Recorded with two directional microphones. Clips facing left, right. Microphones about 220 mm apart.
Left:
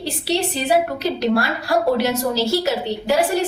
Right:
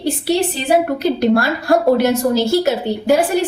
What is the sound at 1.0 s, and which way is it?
A woman's voice, 50° right (ahead or behind).